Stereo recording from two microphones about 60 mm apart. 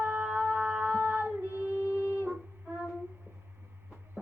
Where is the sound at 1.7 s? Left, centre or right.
Left.